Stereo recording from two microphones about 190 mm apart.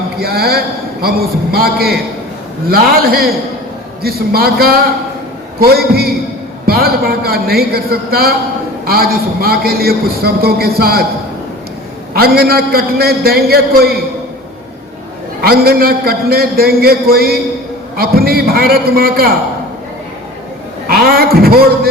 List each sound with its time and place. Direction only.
0.2 s a man's voice: 55° right (ahead or behind)
12.1 s a man's voice: 55° right (ahead or behind)
15.4 s a man's voice: 55° right (ahead or behind)
20.8 s a man's voice: 50° right (ahead or behind)